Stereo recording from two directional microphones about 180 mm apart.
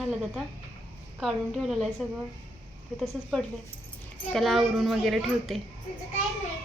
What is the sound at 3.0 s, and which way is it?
A woman's voice, centre (ahead or behind).